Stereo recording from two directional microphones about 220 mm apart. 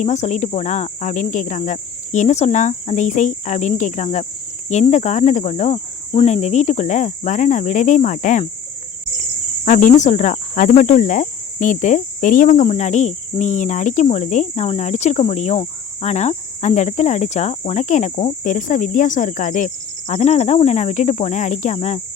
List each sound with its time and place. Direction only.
0.0 s cricket: 30° left (ahead or behind)
9.6 s cricket: 35° left (ahead or behind)